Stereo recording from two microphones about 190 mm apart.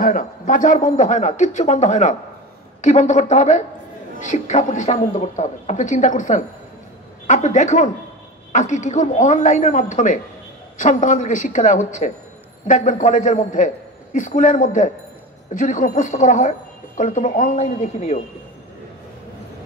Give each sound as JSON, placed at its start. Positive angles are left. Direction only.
{"t": 0.0, "sound": "a woman's voice", "side_deg": 45}